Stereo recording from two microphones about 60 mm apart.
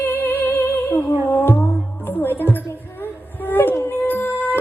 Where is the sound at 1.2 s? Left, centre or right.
Left.